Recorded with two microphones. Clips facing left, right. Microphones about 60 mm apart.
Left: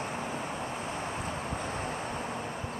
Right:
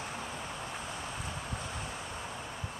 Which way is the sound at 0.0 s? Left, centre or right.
Left.